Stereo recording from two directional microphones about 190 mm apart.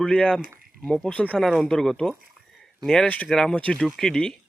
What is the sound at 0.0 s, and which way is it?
A man's voice, 5° left (ahead or behind).